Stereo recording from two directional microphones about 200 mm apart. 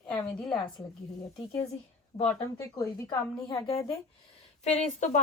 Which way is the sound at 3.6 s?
30° left (ahead or behind).